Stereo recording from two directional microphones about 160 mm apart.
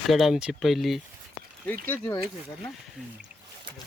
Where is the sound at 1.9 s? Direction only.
15° left (ahead or behind).